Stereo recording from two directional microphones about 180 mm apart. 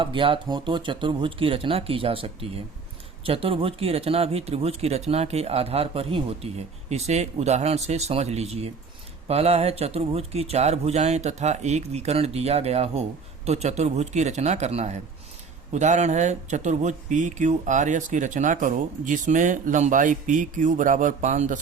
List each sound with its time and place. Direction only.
0.0 s speech: 30° right (ahead or behind)